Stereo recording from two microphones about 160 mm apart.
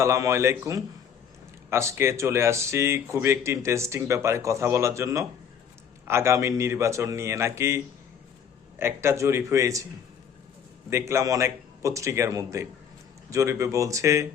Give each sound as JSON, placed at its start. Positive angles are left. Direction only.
{"t": 0.0, "sound": "a man's voice", "side_deg": -20}
{"t": 8.8, "sound": "a man's voice", "side_deg": -15}
{"t": 10.8, "sound": "a man's voice", "side_deg": -15}